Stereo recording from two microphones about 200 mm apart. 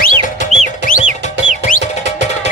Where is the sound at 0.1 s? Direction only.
35° right (ahead or behind).